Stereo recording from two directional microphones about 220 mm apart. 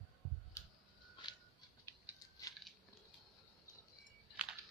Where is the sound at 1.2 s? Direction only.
20° left (ahead or behind).